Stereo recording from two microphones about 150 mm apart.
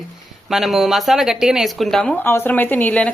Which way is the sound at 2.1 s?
15° left (ahead or behind).